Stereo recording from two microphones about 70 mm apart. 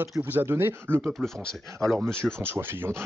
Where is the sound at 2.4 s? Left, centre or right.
Right.